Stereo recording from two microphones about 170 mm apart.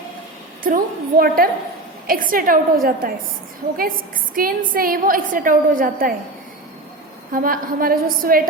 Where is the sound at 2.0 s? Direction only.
55° right (ahead or behind).